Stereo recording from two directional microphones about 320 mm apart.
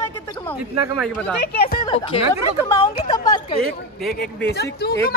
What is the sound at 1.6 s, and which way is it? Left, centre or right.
Speech, centre.